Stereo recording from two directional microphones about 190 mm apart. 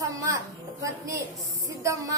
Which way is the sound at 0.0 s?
15° right (ahead or behind).